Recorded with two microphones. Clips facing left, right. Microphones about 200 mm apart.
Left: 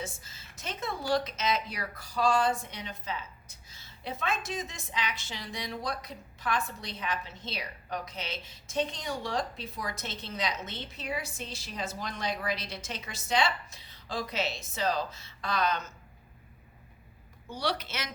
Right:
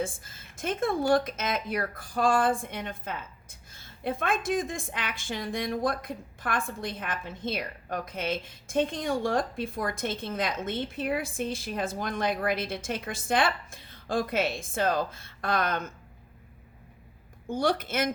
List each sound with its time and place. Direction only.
0.0 s speech: 50° right (ahead or behind)
17.4 s speech: 50° right (ahead or behind)